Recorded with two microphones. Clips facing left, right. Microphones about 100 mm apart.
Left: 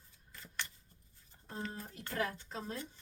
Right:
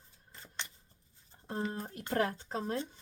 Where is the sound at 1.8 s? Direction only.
55° right (ahead or behind).